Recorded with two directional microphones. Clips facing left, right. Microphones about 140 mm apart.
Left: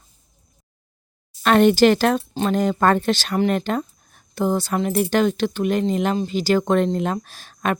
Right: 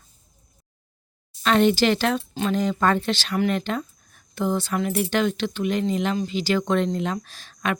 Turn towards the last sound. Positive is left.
turn(degrees=45)  # may be behind; listen again after turning